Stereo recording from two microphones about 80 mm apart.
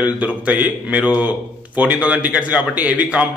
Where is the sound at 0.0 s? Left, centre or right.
Centre.